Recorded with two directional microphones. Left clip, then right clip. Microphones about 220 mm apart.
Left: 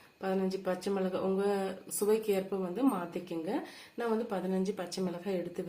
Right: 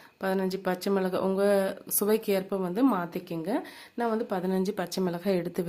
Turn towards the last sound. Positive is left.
turn(degrees=-55)  # may be behind; listen again after turning